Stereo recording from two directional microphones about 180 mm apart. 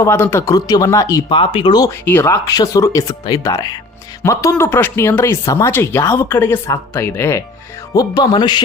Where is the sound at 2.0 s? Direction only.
15° left (ahead or behind).